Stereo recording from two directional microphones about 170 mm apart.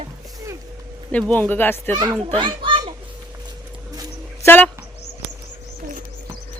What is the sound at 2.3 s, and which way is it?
Children playing, 30° right (ahead or behind).